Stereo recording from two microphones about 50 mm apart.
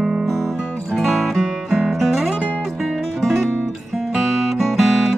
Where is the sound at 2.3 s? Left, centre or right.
Left.